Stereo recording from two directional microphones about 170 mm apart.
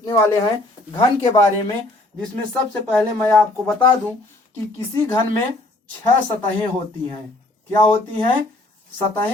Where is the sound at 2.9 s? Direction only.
5° left (ahead or behind).